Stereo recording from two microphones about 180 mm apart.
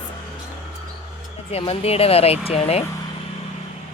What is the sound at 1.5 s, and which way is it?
Speech, 35° left (ahead or behind).